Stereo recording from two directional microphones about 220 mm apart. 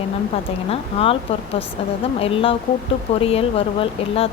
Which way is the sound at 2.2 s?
25° left (ahead or behind).